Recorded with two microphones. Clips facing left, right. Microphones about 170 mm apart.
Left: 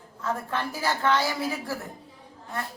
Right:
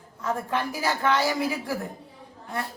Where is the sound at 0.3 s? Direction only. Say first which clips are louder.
Right 2 dB; 15° right (ahead or behind).